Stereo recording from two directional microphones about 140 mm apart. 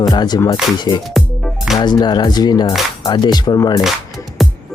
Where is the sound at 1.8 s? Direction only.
30° left (ahead or behind).